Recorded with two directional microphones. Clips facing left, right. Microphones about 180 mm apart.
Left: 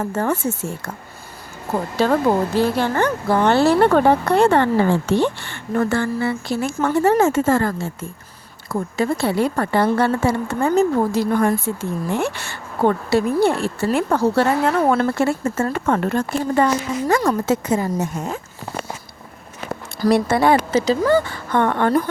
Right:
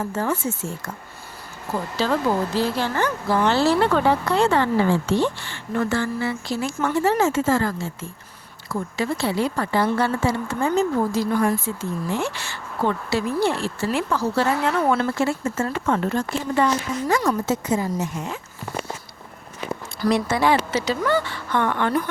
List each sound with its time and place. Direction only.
0.0 s a woman's voice: 65° left (ahead or behind); by 11.6 s 45° left (ahead or behind)
11.6 s a woman's voice: 65° left (ahead or behind)
14.6 s a woman's voice: 45° left (ahead or behind)
17.5 s a woman's voice: 70° left (ahead or behind); by 18.3 s 45° left (ahead or behind)
20.0 s a woman's voice: 55° left (ahead or behind)
20.7 s a woman's voice: 40° left (ahead or behind)